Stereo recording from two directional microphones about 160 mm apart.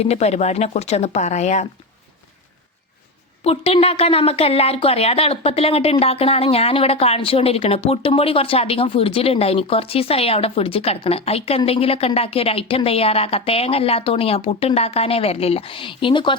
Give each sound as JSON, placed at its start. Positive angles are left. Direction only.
{"t": 0.0, "sound": "speech", "side_deg": 40}
{"t": 3.4, "sound": "a woman's voice", "side_deg": 40}